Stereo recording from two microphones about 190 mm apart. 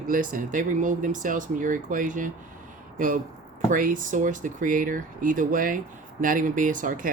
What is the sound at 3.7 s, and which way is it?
Speech, 45° right (ahead or behind).